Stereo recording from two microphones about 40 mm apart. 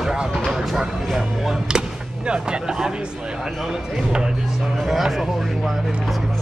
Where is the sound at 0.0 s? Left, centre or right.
Centre.